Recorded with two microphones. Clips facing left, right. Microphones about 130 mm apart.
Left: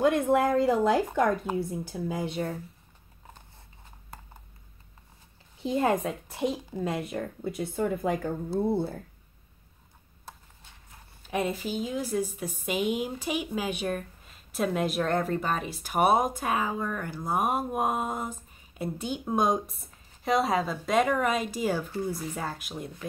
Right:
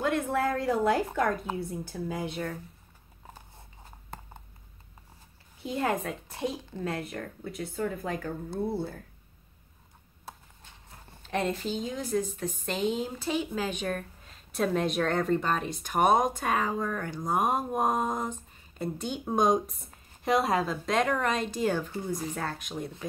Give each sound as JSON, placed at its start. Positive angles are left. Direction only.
{"t": 0.0, "sound": "a woman's voice", "side_deg": 15}
{"t": 5.6, "sound": "speech", "side_deg": 25}
{"t": 6.3, "sound": "a woman's voice", "side_deg": 15}
{"t": 10.3, "sound": "a sound", "side_deg": 0}
{"t": 11.2, "sound": "a woman's voice", "side_deg": 10}